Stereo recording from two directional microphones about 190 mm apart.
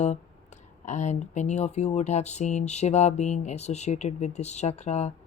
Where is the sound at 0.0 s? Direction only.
40° left (ahead or behind).